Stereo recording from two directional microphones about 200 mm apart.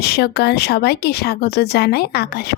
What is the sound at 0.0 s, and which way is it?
Speech, 55° left (ahead or behind).